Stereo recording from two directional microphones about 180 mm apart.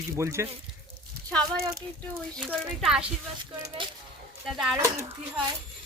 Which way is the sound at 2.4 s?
5° right (ahead or behind).